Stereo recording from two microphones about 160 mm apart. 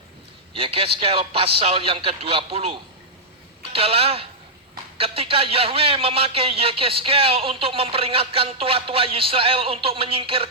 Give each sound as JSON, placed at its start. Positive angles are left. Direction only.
{"t": 0.5, "sound": "speech", "side_deg": -35}